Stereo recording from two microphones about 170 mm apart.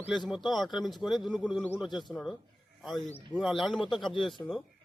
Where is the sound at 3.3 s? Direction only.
Centre (ahead or behind).